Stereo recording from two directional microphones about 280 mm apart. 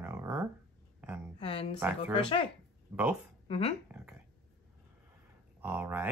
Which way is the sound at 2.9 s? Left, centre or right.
Centre.